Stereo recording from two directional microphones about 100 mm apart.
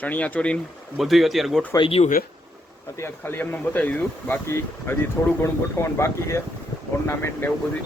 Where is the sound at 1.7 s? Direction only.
65° left (ahead or behind).